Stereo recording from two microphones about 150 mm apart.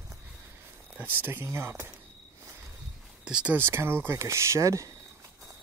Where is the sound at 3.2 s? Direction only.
5° right (ahead or behind).